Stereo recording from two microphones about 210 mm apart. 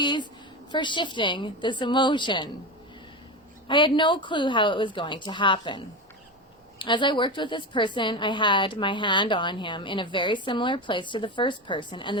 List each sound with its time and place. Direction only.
0.0 s a sound: 20° left (ahead or behind)
0.7 s a woman's voice: 20° left (ahead or behind)
3.7 s a woman's voice: 25° left (ahead or behind)